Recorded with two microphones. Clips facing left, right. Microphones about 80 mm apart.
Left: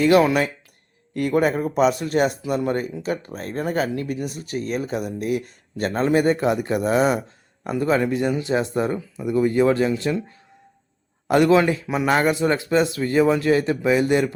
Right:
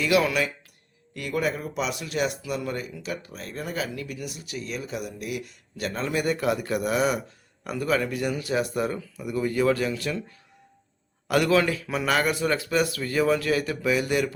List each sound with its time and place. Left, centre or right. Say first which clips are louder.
0.0 s speech: left 6 dB; left